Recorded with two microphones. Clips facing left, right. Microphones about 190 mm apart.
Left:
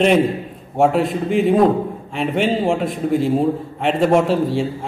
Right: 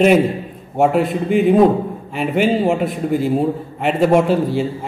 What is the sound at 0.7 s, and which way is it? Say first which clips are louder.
A man's voice: right 1 dB; centre (ahead or behind).